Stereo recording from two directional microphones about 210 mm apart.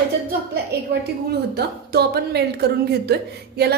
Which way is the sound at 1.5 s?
50° right (ahead or behind).